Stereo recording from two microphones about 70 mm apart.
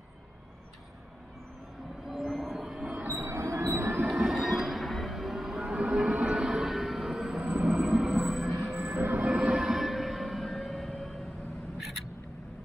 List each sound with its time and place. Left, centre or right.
2.0 s vehicle: centre
3.1 s train: right
4.0 s train: centre
9.2 s music: centre